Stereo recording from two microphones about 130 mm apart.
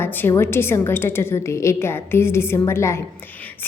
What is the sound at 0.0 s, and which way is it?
A woman's voice, 15° left (ahead or behind).